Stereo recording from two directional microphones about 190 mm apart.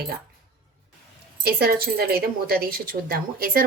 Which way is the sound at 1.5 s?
55° right (ahead or behind).